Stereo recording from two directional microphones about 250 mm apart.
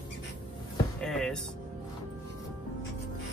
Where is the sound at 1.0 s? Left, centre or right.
Centre.